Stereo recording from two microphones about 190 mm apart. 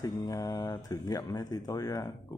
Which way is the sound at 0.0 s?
15° left (ahead or behind).